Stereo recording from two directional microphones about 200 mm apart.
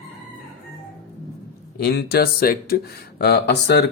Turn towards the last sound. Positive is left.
turn(degrees=55)  # may be behind; listen again after turning